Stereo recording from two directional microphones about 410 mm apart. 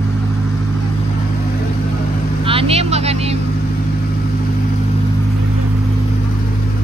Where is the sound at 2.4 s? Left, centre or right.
Centre.